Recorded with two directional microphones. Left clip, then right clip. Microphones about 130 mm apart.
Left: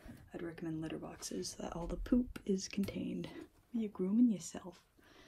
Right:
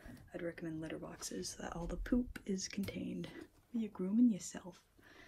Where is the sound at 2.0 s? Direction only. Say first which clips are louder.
Left 3 dB; 30° left (ahead or behind).